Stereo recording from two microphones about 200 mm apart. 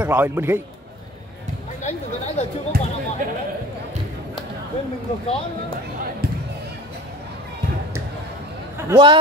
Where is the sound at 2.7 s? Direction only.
50° right (ahead or behind).